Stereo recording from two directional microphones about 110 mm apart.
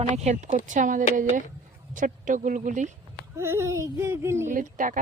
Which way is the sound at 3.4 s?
25° right (ahead or behind).